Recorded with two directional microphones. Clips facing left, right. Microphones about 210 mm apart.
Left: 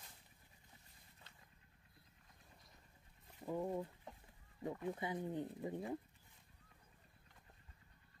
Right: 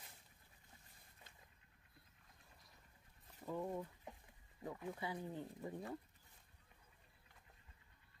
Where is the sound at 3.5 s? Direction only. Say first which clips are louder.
Left 3 dB; 15° left (ahead or behind).